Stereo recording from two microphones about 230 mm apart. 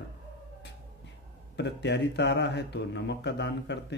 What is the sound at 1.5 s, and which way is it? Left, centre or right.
A man's voice, left.